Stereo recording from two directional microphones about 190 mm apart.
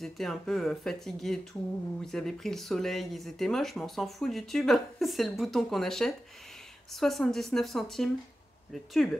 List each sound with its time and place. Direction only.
0.0 s speech: centre (ahead or behind)